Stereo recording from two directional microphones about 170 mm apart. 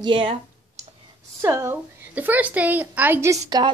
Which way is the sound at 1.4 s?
15° right (ahead or behind).